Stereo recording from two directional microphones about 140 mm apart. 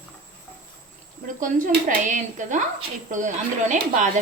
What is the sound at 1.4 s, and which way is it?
A woman's voice, 70° right (ahead or behind).